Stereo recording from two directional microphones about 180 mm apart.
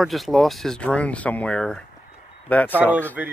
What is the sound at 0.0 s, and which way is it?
Speech, centre (ahead or behind).